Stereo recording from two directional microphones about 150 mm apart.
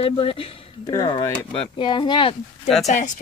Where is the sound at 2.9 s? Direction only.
55° left (ahead or behind).